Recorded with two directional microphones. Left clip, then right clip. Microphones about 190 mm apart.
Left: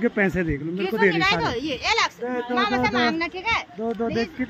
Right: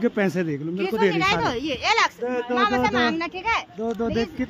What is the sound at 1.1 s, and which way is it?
A child's voice, 55° right (ahead or behind).